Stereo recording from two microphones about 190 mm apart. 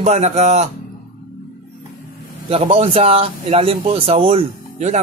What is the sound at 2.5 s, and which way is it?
Speech, 30° right (ahead or behind).